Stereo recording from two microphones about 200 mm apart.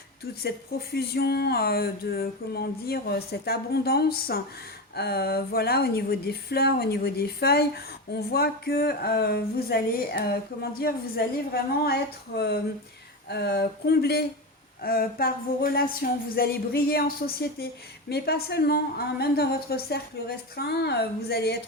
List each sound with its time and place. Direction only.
0.4 s speech: 50° left (ahead or behind)